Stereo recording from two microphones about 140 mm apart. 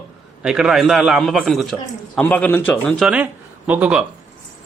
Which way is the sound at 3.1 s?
10° right (ahead or behind).